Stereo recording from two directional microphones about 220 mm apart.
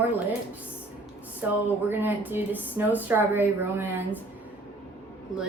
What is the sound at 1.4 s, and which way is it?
Speech, 10° right (ahead or behind).